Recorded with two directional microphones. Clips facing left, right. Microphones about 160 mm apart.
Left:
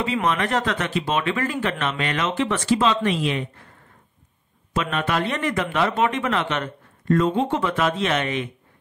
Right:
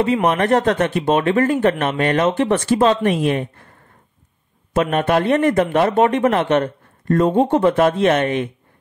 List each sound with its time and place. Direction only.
0.3 s a man's voice: 50° right (ahead or behind)
4.7 s a man's voice: 50° right (ahead or behind)